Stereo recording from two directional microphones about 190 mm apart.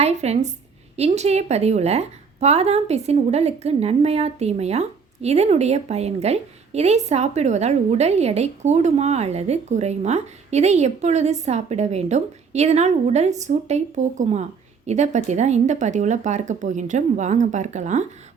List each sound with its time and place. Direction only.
0.0 s a woman's voice: 35° right (ahead or behind)